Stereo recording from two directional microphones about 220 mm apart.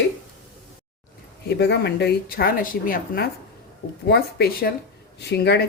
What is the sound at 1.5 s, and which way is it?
Speech, 50° left (ahead or behind).